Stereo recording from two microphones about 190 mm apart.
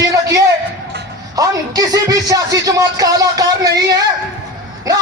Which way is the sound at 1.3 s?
20° right (ahead or behind).